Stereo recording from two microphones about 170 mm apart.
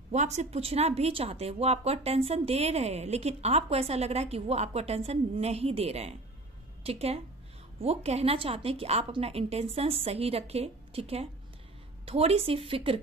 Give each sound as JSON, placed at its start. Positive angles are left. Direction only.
{"t": 0.1, "sound": "a woman's voice", "side_deg": -40}